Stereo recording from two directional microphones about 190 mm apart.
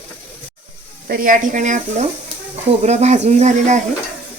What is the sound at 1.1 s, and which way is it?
Speech, 45° right (ahead or behind).